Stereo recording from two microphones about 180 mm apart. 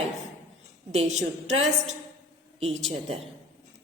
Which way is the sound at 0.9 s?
40° right (ahead or behind).